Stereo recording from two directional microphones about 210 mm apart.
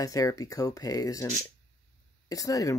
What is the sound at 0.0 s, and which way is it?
Speech, 15° left (ahead or behind).